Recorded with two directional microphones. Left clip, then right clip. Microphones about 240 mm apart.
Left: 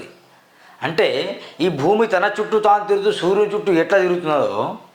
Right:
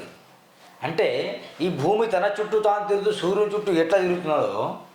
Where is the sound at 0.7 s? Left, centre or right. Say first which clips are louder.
Left 5 dB; left.